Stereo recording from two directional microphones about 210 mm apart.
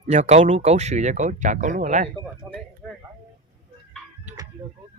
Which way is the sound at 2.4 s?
15° right (ahead or behind).